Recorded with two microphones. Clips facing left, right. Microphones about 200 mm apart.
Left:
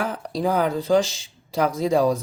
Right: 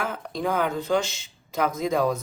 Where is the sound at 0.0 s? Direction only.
35° left (ahead or behind).